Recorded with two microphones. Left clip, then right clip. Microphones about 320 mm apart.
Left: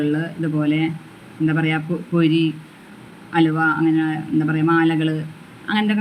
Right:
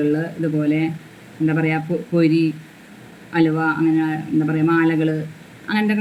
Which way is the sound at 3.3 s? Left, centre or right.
Centre.